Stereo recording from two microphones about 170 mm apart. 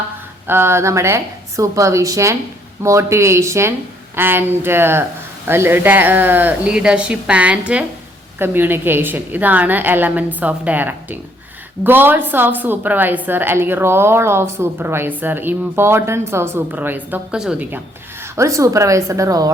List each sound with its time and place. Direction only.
0.4 s a woman's voice: 15° right (ahead or behind)